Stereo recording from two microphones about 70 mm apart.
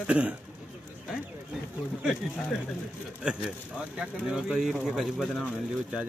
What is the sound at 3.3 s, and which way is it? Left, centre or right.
A man's voice, centre.